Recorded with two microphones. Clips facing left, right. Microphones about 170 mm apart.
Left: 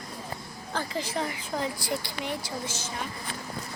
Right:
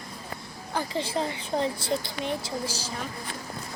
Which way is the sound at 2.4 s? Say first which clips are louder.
Right 3 dB; 35° right (ahead or behind).